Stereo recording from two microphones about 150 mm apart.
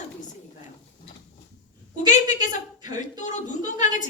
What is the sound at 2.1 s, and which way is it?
A woman's voice, 55° left (ahead or behind).